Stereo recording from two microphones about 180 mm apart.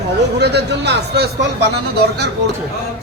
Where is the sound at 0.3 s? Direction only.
70° right (ahead or behind).